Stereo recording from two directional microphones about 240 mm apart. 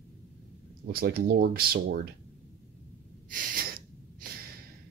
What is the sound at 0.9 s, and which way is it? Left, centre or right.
Speech, right.